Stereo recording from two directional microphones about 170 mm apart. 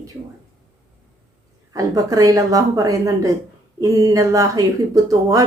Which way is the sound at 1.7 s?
20° right (ahead or behind).